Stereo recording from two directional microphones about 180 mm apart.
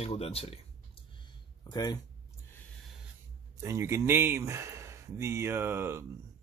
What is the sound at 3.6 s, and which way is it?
Speech, 15° right (ahead or behind).